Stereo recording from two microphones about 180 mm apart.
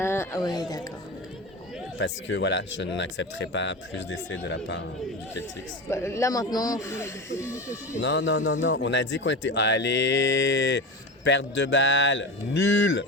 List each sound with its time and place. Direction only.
0.0 s speech: 15° left (ahead or behind)
2.0 s speech: 90° left
5.9 s speech: 15° left (ahead or behind)
8.0 s speech: 85° left